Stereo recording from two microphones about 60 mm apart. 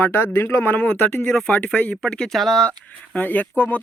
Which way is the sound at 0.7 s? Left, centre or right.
Left.